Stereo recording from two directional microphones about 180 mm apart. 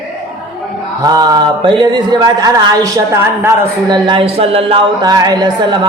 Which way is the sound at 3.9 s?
25° right (ahead or behind).